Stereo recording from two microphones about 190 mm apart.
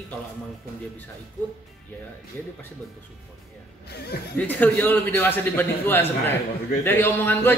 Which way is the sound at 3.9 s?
55° left (ahead or behind).